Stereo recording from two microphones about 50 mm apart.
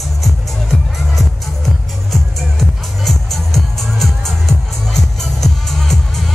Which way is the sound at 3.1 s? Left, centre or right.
Centre.